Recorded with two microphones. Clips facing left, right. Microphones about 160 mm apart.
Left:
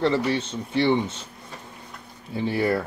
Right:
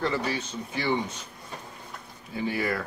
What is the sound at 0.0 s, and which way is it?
Speech, 25° left (ahead or behind).